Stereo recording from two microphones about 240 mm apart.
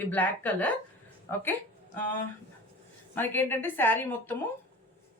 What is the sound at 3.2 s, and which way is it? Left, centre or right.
Speech, centre.